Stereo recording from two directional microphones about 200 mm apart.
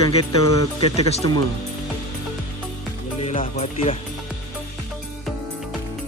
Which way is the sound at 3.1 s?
30° left (ahead or behind).